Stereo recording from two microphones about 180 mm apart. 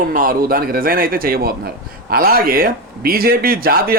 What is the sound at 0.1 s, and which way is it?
A man's voice, 50° right (ahead or behind).